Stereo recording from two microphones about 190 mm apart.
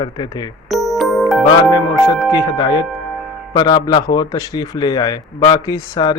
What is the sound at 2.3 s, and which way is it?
Speech, 25° left (ahead or behind).